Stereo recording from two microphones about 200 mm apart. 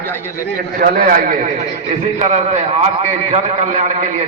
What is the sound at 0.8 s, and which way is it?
A man's voice, 45° right (ahead or behind).